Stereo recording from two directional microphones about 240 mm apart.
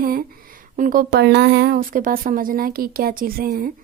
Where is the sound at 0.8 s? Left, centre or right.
Right.